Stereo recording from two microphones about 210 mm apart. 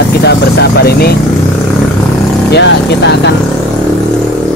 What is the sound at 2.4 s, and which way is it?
Speech, 55° left (ahead or behind).